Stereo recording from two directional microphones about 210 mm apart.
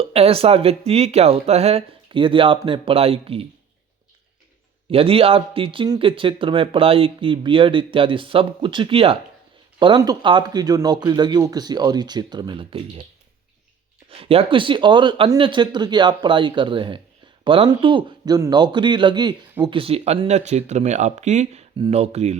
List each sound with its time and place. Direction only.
0.0 s a man's voice: 30° right (ahead or behind)
4.9 s a man's voice: 25° right (ahead or behind)
14.1 s a man's voice: 25° right (ahead or behind)